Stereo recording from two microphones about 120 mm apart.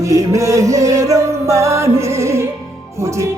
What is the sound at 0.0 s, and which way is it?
Music, 25° right (ahead or behind).